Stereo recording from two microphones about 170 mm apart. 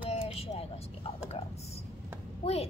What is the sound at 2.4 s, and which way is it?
Speech, 35° left (ahead or behind).